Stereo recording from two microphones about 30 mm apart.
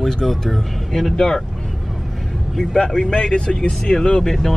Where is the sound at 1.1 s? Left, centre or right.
Centre.